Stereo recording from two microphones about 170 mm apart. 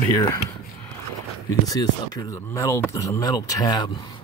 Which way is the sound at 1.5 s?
20° left (ahead or behind).